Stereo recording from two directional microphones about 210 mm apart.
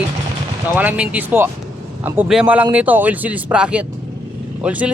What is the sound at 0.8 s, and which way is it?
Speech, 5° right (ahead or behind).